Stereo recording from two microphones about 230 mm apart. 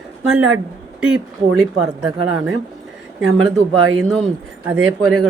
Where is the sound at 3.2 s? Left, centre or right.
Right.